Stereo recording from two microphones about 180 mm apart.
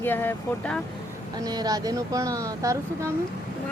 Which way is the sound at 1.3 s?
20° right (ahead or behind).